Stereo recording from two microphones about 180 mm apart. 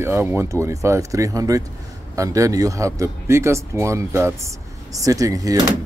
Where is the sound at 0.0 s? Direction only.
10° right (ahead or behind).